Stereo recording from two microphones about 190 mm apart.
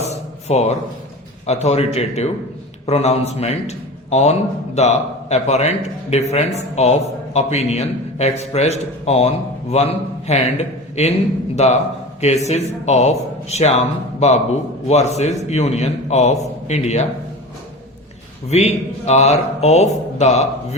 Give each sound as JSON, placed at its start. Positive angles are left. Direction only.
{"t": 0.0, "sound": "tambourine", "side_deg": 35}
{"t": 1.5, "sound": "a man's voice", "side_deg": 35}
{"t": 18.4, "sound": "a man's voice", "side_deg": 35}